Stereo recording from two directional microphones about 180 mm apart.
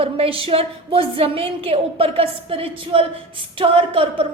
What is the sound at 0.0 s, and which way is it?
A woman's voice, 30° right (ahead or behind).